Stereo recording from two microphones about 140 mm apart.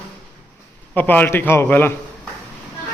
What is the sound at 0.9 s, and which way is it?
Speech, 15° left (ahead or behind).